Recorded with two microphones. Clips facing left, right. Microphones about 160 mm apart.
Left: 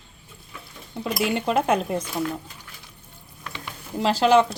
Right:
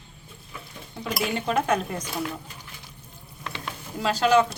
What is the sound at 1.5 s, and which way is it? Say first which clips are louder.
Speech: left 2 dB; 30° left (ahead or behind).